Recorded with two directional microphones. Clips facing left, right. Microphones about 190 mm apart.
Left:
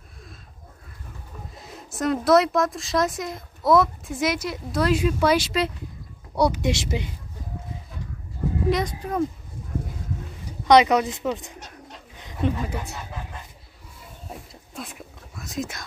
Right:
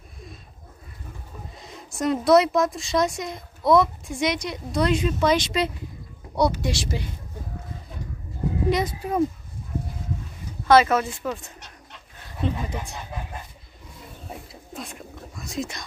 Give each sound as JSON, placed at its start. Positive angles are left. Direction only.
{"t": 1.6, "sound": "speech", "side_deg": 5}
{"t": 6.6, "sound": "speech", "side_deg": 20}
{"t": 8.6, "sound": "speech", "side_deg": -5}
{"t": 10.6, "sound": "speech", "side_deg": 15}
{"t": 12.2, "sound": "a sound", "side_deg": 15}
{"t": 14.5, "sound": "whispering", "side_deg": 0}